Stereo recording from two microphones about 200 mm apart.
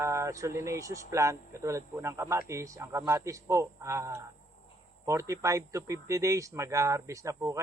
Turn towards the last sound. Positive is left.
turn(degrees=-15)  # may be behind; listen again after turning